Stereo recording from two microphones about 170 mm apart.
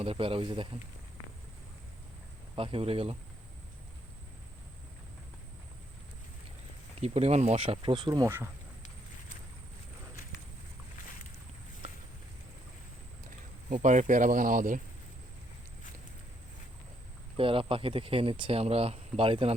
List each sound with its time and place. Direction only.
0.0 s speech: 35° right (ahead or behind)
2.6 s speech: 35° right (ahead or behind)
7.0 s speech: 40° right (ahead or behind); by 8.4 s 15° right (ahead or behind)
13.7 s speech: 50° right (ahead or behind)
17.3 s speech: 30° right (ahead or behind)